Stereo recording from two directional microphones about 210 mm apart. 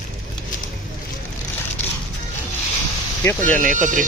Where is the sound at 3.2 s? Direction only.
10° left (ahead or behind).